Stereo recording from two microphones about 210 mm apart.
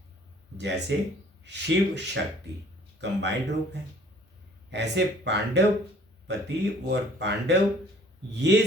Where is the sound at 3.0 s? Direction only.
55° right (ahead or behind).